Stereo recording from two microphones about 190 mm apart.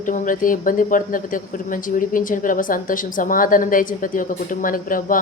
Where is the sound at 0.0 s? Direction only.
45° left (ahead or behind).